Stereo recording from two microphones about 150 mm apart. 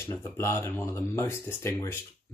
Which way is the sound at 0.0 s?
15° left (ahead or behind).